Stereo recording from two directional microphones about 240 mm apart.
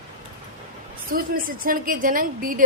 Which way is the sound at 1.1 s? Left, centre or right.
Right.